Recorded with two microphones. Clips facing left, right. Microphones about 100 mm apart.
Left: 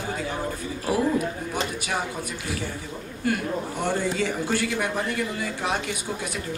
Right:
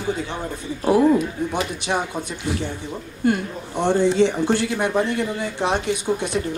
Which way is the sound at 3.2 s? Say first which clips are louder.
Right 4 dB; 25° right (ahead or behind).